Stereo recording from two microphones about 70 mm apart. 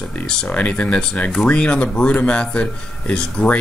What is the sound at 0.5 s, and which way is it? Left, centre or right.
Speech, left.